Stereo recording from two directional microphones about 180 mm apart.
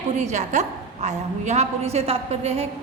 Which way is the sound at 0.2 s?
40° right (ahead or behind).